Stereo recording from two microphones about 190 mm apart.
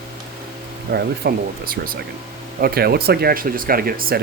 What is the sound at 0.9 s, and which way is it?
Speech, 50° right (ahead or behind).